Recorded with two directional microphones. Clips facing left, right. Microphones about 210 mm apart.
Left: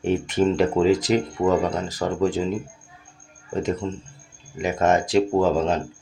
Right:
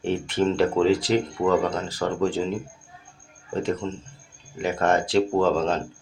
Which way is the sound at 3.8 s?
10° left (ahead or behind).